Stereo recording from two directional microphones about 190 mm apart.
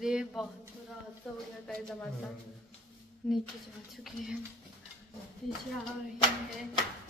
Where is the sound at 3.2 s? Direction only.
Centre (ahead or behind).